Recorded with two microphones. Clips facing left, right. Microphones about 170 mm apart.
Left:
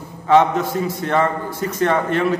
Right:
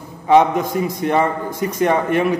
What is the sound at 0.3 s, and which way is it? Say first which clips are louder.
A man's voice: right 1 dB; 15° right (ahead or behind).